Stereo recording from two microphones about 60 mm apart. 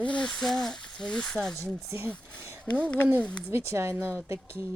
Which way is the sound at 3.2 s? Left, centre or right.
Left.